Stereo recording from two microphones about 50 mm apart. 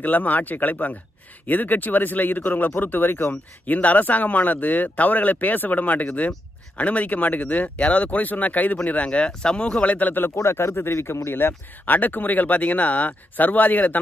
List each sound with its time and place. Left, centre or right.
0.0 s speech: left
3.6 s speech: left
10.3 s speech: left
11.8 s speech: left